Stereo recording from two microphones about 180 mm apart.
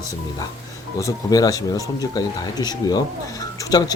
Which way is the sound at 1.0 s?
20° left (ahead or behind).